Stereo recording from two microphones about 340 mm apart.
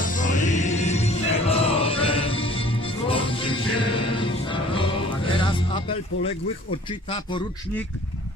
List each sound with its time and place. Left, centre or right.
0.0 s music: left
7.1 s speech: centre